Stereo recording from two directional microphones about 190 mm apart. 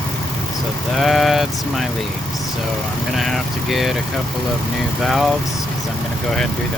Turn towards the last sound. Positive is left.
turn(degrees=0)  # may be behind; listen again after turning